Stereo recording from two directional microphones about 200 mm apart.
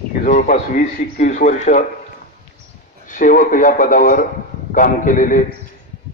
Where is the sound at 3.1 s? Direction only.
40° left (ahead or behind).